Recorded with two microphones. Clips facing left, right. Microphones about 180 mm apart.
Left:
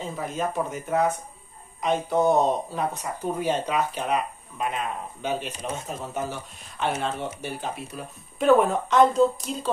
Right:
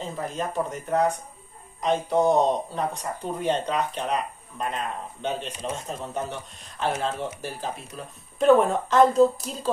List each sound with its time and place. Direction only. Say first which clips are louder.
0.0 s speech: left 1 dB; centre (ahead or behind)